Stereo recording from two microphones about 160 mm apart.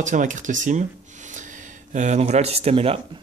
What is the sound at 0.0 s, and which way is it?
Speech, 50° right (ahead or behind).